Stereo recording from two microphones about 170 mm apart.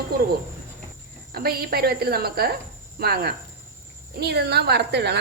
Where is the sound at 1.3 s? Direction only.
65° right (ahead or behind).